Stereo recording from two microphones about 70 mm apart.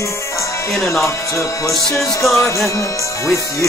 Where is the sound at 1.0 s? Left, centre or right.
Left.